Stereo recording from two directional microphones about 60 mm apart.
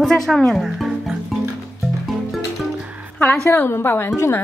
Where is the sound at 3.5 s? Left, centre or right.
Left.